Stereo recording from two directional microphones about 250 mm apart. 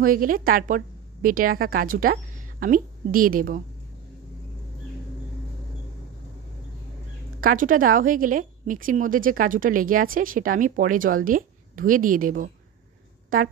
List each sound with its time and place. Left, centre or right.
0.0 s a woman's voice: right
7.3 s a woman's voice: right